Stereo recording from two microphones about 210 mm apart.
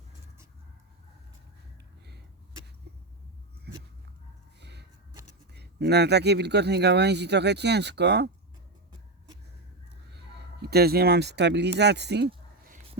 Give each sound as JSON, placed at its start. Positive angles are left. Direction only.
{"t": 2.9, "sound": "a sound", "side_deg": -50}
{"t": 5.5, "sound": "speech", "side_deg": -50}
{"t": 8.9, "sound": "vehicle", "side_deg": -20}
{"t": 10.6, "sound": "speech", "side_deg": -50}